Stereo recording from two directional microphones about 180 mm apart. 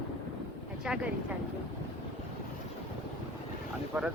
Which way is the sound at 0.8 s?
5° right (ahead or behind).